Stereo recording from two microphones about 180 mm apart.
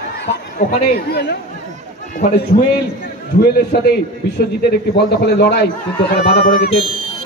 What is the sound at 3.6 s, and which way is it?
A man's voice, 60° left (ahead or behind).